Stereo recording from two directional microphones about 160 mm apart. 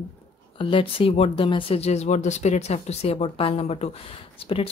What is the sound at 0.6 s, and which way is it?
Speech, 35° left (ahead or behind).